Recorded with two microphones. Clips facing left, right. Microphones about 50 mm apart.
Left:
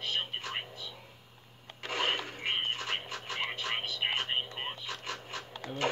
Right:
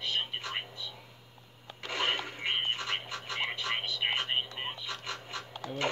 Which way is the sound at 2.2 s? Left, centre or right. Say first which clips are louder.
Right 1 dB; right.